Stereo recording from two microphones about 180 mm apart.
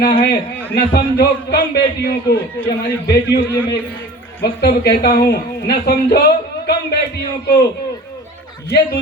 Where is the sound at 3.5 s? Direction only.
20° left (ahead or behind).